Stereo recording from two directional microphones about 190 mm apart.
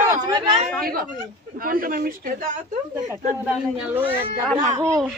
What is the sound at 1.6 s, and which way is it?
Speech, 50° right (ahead or behind).